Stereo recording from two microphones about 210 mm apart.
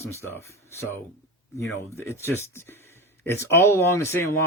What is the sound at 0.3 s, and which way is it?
Speech, 10° left (ahead or behind).